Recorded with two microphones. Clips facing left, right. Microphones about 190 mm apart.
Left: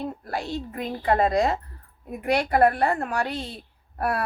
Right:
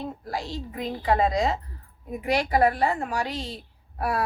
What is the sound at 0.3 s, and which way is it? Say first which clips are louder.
A woman's voice: left 2 dB; 60° left (ahead or behind).